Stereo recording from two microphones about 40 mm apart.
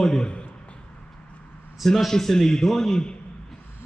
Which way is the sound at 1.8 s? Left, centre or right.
Centre.